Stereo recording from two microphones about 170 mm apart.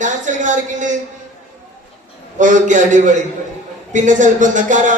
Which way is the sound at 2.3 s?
50° right (ahead or behind).